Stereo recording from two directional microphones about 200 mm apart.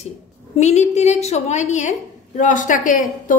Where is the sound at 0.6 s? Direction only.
35° left (ahead or behind).